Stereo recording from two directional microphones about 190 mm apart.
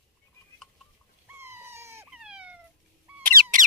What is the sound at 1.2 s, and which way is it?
Dog, 10° right (ahead or behind).